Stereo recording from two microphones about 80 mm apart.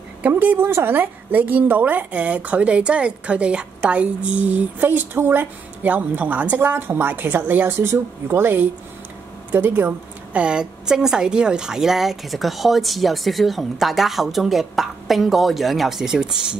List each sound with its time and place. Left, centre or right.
0.3 s a woman's voice: right; by 16.5 s centre